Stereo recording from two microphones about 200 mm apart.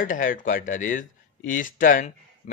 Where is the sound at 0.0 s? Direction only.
45° left (ahead or behind).